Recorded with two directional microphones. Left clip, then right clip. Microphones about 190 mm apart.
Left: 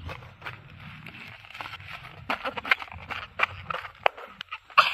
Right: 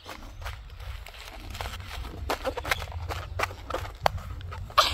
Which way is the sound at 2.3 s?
10° right (ahead or behind).